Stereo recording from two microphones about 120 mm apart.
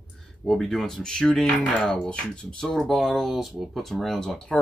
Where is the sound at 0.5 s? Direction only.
Centre (ahead or behind).